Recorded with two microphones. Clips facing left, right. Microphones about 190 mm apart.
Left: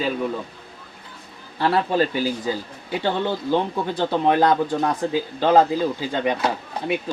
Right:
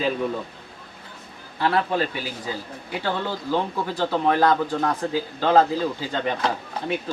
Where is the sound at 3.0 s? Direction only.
20° left (ahead or behind).